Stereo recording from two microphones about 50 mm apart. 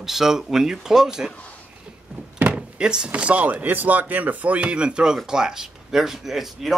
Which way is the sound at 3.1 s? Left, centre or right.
Right.